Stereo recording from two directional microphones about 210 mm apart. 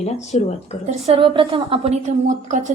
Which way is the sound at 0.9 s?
30° right (ahead or behind).